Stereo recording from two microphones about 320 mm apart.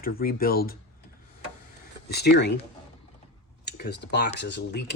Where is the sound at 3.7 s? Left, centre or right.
Left.